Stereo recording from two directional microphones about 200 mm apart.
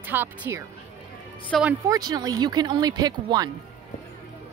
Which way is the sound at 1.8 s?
20° right (ahead or behind).